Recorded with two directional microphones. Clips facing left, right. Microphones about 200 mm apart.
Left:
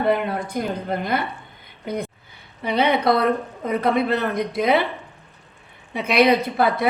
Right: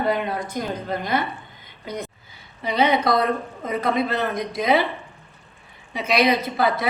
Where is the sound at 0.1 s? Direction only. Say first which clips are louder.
Left 2 dB; 60° left (ahead or behind).